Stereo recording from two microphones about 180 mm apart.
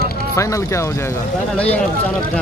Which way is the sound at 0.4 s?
15° left (ahead or behind).